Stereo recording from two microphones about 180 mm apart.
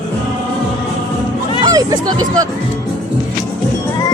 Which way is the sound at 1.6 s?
20° right (ahead or behind).